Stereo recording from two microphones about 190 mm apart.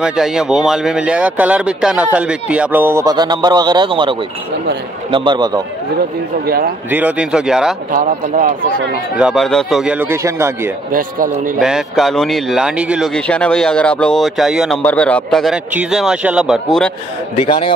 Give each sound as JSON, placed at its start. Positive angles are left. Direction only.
{"t": 0.0, "sound": "a man's voice", "side_deg": -5}
{"t": 6.4, "sound": "a man's voice", "side_deg": -50}
{"t": 6.9, "sound": "speech", "side_deg": -10}
{"t": 7.9, "sound": "a man's voice", "side_deg": -45}
{"t": 9.2, "sound": "speech", "side_deg": 0}
{"t": 10.9, "sound": "a man's voice", "side_deg": -45}
{"t": 11.6, "sound": "speech", "side_deg": 0}
{"t": 17.5, "sound": "a man's voice", "side_deg": 25}